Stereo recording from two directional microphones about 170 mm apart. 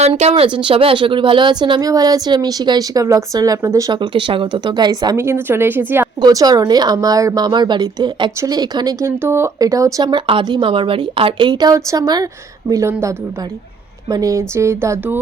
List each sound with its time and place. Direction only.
0.0 s speech: 35° right (ahead or behind); by 6.1 s 10° right (ahead or behind)
6.2 s speech: 25° right (ahead or behind)